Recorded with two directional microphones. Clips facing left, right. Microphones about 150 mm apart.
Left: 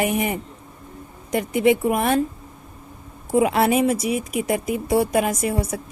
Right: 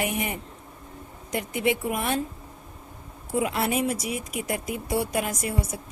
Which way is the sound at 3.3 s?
90° left.